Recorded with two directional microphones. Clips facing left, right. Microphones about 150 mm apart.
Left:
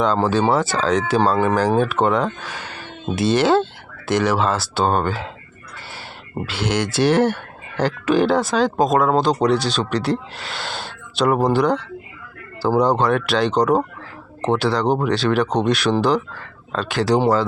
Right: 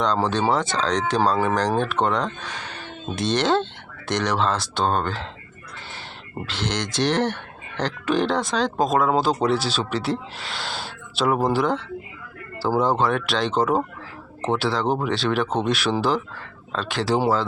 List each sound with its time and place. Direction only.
0.0 s speech: 5° left (ahead or behind)
6.4 s speech: 10° left (ahead or behind)